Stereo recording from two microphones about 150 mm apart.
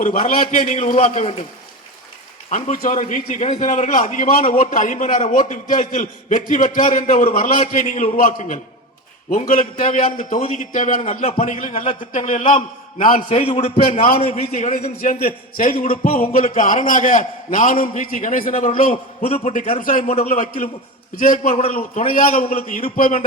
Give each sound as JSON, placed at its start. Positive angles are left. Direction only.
{"t": 0.0, "sound": "a man's voice", "side_deg": 55}
{"t": 2.5, "sound": "a man's voice", "side_deg": 60}
{"t": 4.4, "sound": "a man's voice", "side_deg": 45}
{"t": 13.1, "sound": "a man's voice", "side_deg": 45}
{"t": 15.2, "sound": "a man's voice", "side_deg": 70}
{"t": 20.1, "sound": "a man's voice", "side_deg": 45}
{"t": 20.3, "sound": "a man's voice", "side_deg": 60}
{"t": 21.9, "sound": "a man's voice", "side_deg": 65}